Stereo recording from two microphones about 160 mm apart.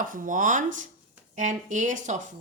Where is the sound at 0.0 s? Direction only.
55° right (ahead or behind).